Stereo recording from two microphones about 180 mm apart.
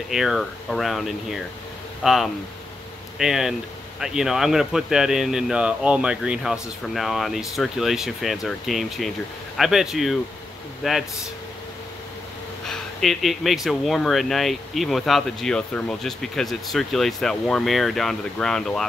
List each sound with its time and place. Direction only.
0.1 s speech: centre (ahead or behind)
12.6 s speech: centre (ahead or behind)